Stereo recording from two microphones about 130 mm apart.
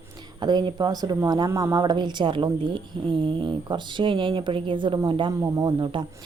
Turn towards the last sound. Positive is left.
turn(degrees=-30)  # may be behind; listen again after turning